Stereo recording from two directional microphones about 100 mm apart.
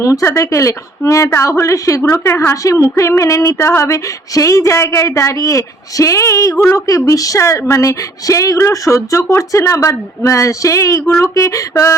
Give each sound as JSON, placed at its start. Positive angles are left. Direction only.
{"t": 0.0, "sound": "speech", "side_deg": 30}